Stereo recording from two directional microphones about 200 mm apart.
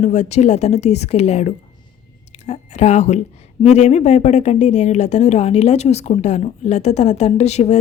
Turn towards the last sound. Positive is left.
turn(degrees=35)  # may be behind; listen again after turning